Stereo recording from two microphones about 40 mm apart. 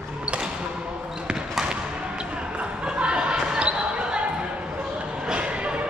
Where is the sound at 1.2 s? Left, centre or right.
Centre.